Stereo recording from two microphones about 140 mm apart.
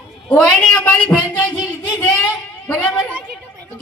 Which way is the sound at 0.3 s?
10° left (ahead or behind).